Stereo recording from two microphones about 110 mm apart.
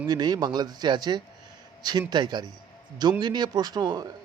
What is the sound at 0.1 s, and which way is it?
A man's voice, 40° right (ahead or behind).